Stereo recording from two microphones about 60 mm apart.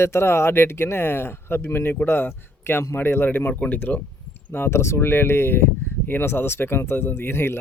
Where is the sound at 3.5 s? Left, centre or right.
Left.